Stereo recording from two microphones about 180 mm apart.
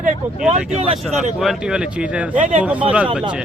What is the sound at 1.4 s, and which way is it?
A man's voice, centre (ahead or behind).